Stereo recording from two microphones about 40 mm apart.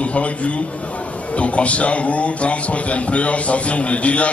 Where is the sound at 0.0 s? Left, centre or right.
Left.